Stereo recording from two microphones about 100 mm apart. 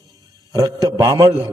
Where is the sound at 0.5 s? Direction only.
40° right (ahead or behind).